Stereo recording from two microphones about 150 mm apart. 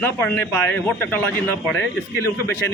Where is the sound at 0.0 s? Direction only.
15° left (ahead or behind).